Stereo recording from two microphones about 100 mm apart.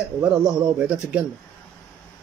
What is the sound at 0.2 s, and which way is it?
Speech, 5° right (ahead or behind).